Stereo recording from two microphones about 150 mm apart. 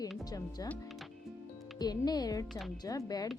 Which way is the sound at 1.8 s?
25° left (ahead or behind).